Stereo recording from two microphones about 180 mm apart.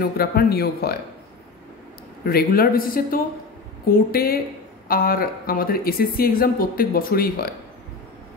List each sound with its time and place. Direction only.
0.0 s a woman's voice: 60° left (ahead or behind)
2.2 s a woman's voice: 55° left (ahead or behind)